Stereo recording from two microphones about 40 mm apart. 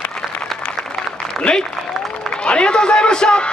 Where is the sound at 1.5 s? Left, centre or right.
Left.